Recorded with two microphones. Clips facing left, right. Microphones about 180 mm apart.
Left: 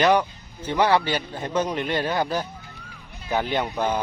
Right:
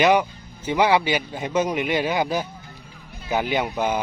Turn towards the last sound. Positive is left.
turn(degrees=-10)  # may be behind; listen again after turning